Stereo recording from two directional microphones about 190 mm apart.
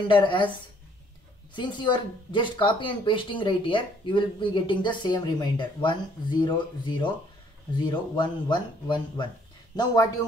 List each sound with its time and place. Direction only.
0.1 s speech: 25° left (ahead or behind)
1.5 s speech: 25° left (ahead or behind)